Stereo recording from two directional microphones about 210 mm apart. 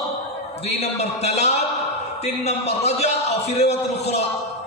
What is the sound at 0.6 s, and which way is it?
A man's voice, 30° left (ahead or behind).